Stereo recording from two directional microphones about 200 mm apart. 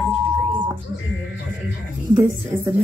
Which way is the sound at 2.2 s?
15° right (ahead or behind).